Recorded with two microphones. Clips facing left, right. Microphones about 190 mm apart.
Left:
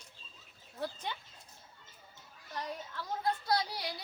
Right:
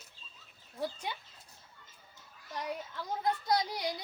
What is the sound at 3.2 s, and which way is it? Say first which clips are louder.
Speech: right 2 dB; 20° right (ahead or behind).